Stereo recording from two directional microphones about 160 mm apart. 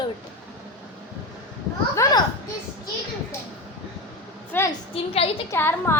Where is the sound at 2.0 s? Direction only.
20° left (ahead or behind).